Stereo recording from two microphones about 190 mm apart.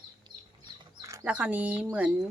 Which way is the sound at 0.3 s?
20° right (ahead or behind).